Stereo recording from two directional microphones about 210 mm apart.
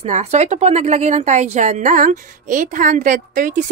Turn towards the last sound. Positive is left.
turn(degrees=-40)  # may be behind; listen again after turning